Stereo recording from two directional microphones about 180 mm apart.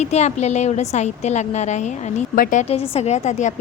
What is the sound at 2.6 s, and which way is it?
Speech, 30° left (ahead or behind).